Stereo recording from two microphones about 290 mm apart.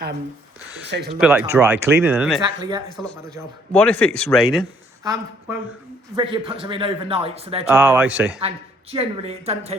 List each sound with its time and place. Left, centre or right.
0.9 s speech: right
1.2 s speech: centre
2.4 s a man's voice: centre
2.9 s speech: centre
6.1 s a man's voice: centre
7.7 s speech: centre
8.4 s speech: centre